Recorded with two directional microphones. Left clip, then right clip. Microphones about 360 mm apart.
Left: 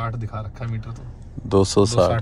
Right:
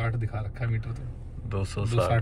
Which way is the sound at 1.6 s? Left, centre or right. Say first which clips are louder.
Left 17 dB; left.